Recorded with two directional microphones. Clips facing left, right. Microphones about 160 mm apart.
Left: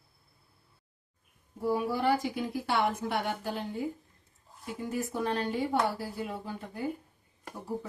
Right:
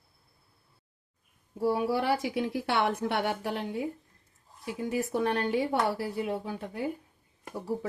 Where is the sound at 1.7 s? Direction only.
70° right (ahead or behind).